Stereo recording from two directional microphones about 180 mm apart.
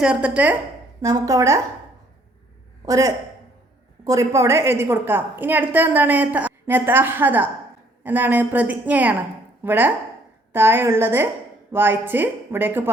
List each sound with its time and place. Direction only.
0.0 s a woman's voice: 5° right (ahead or behind)
1.0 s a woman's voice: 20° right (ahead or behind)
2.8 s a woman's voice: 20° right (ahead or behind)